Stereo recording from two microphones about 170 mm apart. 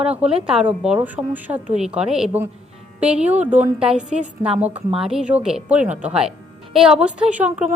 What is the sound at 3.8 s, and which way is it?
Speech, 45° right (ahead or behind).